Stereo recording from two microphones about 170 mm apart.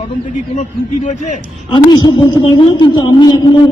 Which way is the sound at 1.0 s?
45° left (ahead or behind).